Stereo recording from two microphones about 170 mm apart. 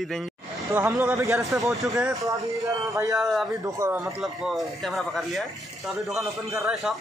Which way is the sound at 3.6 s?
15° right (ahead or behind).